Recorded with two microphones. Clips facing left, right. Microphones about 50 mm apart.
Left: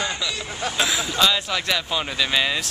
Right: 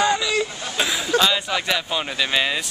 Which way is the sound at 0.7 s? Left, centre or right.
Centre.